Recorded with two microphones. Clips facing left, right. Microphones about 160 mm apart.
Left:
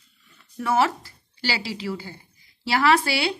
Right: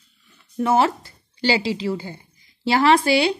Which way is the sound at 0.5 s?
25° right (ahead or behind).